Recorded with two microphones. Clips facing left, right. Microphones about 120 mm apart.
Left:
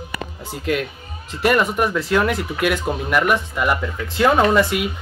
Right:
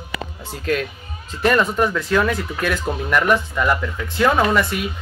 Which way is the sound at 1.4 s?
15° left (ahead or behind).